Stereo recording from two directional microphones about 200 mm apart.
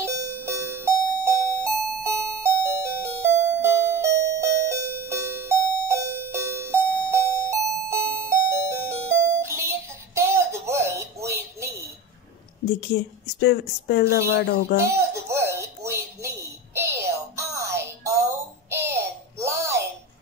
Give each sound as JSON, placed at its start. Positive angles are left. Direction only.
{"t": 0.0, "sound": "music", "side_deg": -15}
{"t": 12.6, "sound": "speech", "side_deg": 55}
{"t": 14.8, "sound": "a sound", "side_deg": -15}